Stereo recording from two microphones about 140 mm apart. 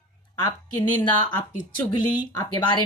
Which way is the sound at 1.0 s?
30° left (ahead or behind).